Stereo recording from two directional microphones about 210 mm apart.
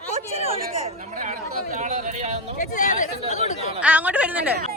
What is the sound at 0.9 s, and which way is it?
Speech, 40° right (ahead or behind).